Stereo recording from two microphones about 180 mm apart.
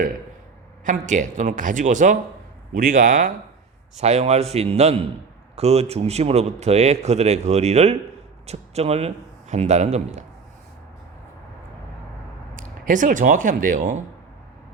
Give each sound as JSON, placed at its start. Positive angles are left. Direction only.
{"t": 0.9, "sound": "speech", "side_deg": -45}
{"t": 12.5, "sound": "speech", "side_deg": -45}